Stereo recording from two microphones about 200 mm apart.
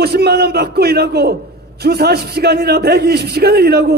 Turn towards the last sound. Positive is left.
turn(degrees=-50)  # may be behind; listen again after turning